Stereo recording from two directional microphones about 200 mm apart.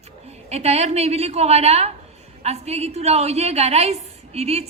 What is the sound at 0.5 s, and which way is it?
A woman's voice, 30° right (ahead or behind).